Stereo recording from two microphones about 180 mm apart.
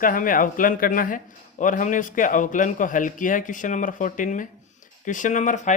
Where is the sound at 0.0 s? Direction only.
50° left (ahead or behind).